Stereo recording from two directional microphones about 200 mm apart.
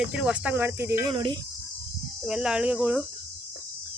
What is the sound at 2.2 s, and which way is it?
Speech, 5° right (ahead or behind).